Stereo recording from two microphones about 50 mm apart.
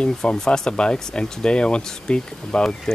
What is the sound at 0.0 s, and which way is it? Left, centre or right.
Speech, centre.